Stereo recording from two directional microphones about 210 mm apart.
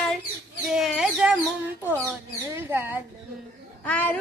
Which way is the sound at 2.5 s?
10° right (ahead or behind).